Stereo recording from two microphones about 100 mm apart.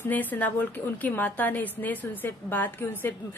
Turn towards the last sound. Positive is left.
turn(degrees=20)  # may be behind; listen again after turning